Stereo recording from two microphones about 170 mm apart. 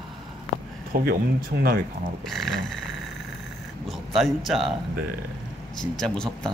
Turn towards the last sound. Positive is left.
turn(degrees=5)  # may be behind; listen again after turning